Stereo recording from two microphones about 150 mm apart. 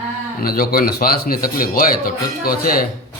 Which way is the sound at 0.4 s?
80° left.